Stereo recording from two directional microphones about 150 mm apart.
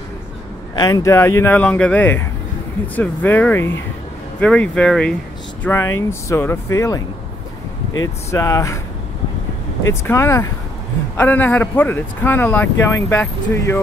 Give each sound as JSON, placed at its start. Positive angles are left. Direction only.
{"t": 0.7, "sound": "speech", "side_deg": 25}
{"t": 5.6, "sound": "speech", "side_deg": 15}
{"t": 8.3, "sound": "speech", "side_deg": 20}
{"t": 10.0, "sound": "speech", "side_deg": 20}